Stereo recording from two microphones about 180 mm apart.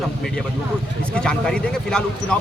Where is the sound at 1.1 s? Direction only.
5° left (ahead or behind).